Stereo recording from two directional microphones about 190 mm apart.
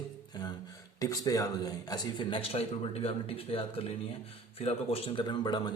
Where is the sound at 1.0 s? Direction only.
20° left (ahead or behind).